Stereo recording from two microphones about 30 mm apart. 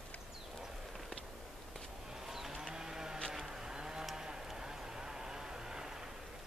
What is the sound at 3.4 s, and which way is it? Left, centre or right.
Vehicle, centre.